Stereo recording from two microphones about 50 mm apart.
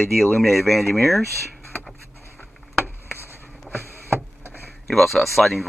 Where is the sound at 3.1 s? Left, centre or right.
Left.